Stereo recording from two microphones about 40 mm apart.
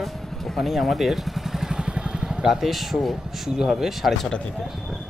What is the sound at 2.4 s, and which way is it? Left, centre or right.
A man's voice, centre.